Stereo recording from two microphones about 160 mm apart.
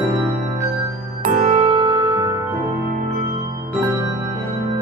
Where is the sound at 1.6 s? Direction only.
35° right (ahead or behind).